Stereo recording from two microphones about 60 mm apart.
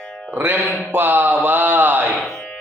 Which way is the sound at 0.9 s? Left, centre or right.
Right.